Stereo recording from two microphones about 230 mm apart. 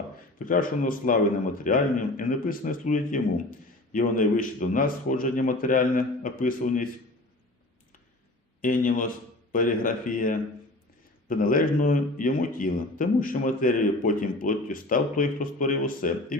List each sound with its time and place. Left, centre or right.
0.3 s speech: left
8.6 s speech: left